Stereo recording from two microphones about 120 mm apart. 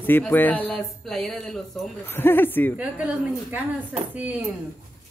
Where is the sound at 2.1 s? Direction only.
20° left (ahead or behind).